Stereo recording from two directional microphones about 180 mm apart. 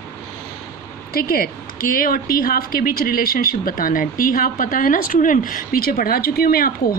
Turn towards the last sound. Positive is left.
turn(degrees=55)  # may be behind; listen again after turning